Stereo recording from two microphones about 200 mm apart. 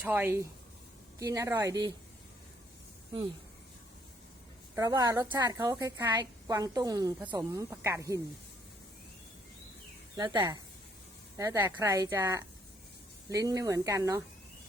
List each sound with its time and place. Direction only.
0.0 s a woman's voice: 10° right (ahead or behind)
4.7 s a woman's voice: 15° right (ahead or behind)
10.2 s a woman's voice: 20° right (ahead or behind)